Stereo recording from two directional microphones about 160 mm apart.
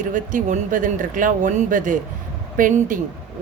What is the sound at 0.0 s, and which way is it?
Speech, 55° right (ahead or behind).